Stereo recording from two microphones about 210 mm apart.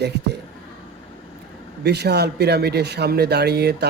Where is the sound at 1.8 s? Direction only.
50° right (ahead or behind).